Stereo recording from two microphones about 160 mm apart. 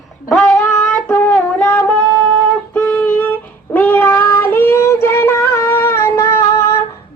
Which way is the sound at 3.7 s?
10° left (ahead or behind).